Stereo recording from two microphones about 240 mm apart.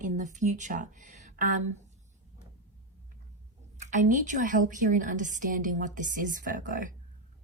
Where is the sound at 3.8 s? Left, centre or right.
Right.